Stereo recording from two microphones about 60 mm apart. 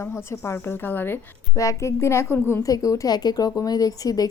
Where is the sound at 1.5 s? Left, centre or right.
Left.